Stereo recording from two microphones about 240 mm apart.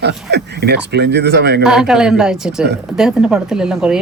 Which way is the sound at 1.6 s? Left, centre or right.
Centre.